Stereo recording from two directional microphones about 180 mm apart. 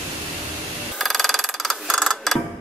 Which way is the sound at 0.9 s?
Centre (ahead or behind).